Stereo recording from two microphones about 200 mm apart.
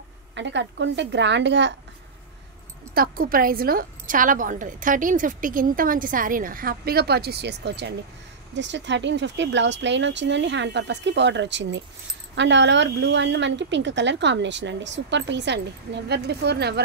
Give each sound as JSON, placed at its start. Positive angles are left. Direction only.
{"t": 0.3, "sound": "speech", "side_deg": -60}
{"t": 2.9, "sound": "a woman's voice", "side_deg": -45}